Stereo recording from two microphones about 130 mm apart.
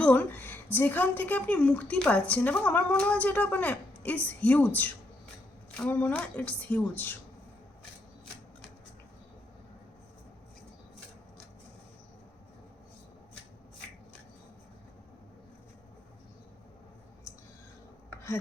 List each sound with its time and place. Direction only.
0.0 s a woman's voice: 15° left (ahead or behind)